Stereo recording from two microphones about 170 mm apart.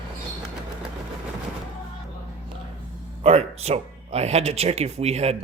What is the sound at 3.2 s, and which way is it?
Speech, 35° right (ahead or behind).